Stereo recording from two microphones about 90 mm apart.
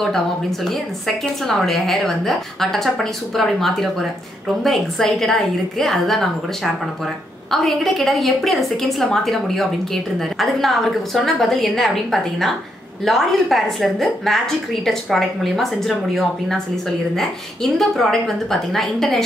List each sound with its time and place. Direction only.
0.0 s a woman's voice: 5° left (ahead or behind)